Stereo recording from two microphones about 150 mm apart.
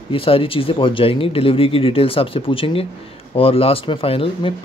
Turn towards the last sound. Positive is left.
turn(degrees=40)  # may be behind; listen again after turning